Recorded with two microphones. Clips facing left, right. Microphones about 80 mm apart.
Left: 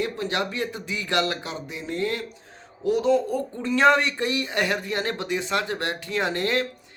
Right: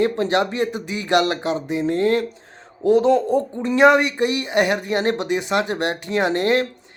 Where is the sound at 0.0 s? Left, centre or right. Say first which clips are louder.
Right 8 dB; right.